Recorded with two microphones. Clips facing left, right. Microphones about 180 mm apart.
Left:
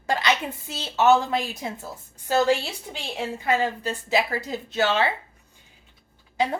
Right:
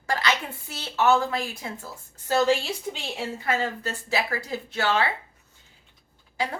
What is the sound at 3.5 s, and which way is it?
A woman's voice, 15° left (ahead or behind).